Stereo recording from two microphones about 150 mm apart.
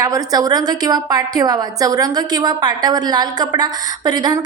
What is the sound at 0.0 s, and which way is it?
A woman's voice, 25° right (ahead or behind).